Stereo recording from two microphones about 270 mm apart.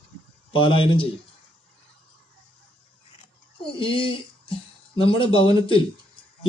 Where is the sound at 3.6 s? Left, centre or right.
Centre.